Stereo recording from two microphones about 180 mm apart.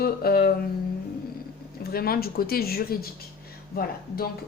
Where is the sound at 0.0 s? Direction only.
55° left (ahead or behind).